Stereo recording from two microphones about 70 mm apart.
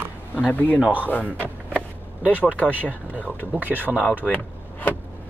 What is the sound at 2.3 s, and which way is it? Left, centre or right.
Speech, left.